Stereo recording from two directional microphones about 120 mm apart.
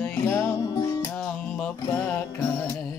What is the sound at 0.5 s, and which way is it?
Music, 30° left (ahead or behind).